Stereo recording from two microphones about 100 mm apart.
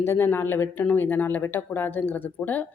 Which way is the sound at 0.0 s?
25° left (ahead or behind).